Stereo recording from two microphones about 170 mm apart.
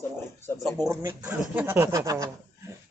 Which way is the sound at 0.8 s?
15° right (ahead or behind).